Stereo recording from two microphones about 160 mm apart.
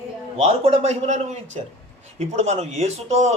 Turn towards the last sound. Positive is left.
turn(degrees=-45)  # may be behind; listen again after turning